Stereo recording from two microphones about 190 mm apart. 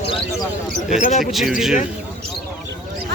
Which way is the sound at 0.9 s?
40° left (ahead or behind).